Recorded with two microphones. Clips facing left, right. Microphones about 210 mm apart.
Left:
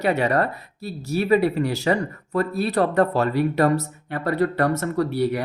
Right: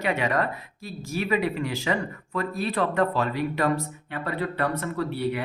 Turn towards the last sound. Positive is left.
turn(degrees=40)  # may be behind; listen again after turning